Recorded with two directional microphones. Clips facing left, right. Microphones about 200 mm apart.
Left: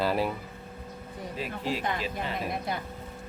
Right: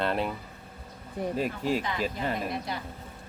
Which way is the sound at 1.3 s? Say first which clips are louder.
Right 3 dB; 45° right (ahead or behind).